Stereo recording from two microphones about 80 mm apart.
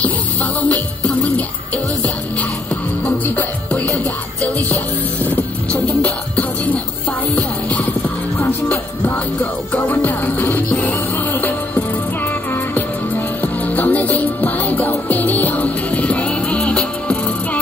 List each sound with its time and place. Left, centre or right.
0.6 s music: centre
3.1 s music: centre
13.4 s music: left